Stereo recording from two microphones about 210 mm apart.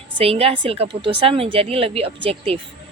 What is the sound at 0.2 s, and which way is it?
A woman's voice, 30° right (ahead or behind).